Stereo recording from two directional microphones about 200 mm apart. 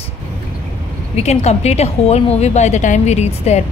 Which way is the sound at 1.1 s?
35° left (ahead or behind).